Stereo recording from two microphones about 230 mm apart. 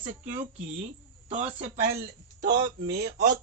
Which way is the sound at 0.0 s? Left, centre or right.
Right.